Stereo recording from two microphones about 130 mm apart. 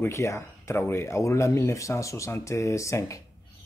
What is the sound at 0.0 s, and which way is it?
Speech, 20° left (ahead or behind).